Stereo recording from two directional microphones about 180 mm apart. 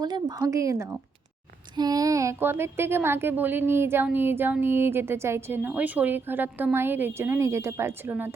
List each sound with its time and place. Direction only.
0.0 s a woman's voice: 20° right (ahead or behind)